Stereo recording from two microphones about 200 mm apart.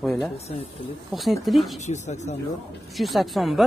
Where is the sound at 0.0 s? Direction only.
Centre (ahead or behind).